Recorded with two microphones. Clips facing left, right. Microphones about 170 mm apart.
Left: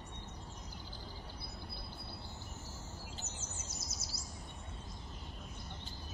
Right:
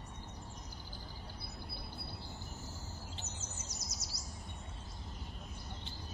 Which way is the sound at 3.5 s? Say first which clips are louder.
Even; 30° left (ahead or behind).